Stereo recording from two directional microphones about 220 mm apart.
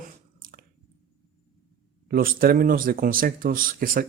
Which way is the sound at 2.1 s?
40° right (ahead or behind).